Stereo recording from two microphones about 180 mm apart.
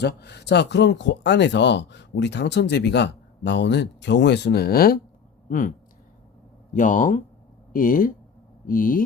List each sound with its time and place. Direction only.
0.0 s speech: 70° left (ahead or behind)
5.5 s speech: 45° left (ahead or behind)
6.7 s speech: 45° left (ahead or behind)